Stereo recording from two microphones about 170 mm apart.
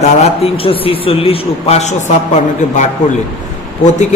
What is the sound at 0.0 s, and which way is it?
A man's voice, 35° left (ahead or behind).